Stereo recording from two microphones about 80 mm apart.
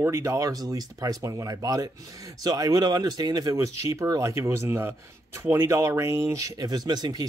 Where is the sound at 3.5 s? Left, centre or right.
Right.